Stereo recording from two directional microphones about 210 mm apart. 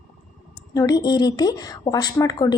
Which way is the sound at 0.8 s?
20° left (ahead or behind).